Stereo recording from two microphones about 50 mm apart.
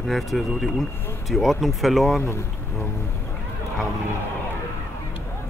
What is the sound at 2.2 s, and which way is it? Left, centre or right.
Speech, left.